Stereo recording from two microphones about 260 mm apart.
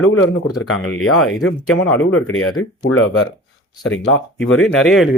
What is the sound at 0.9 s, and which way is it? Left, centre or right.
Speech, left.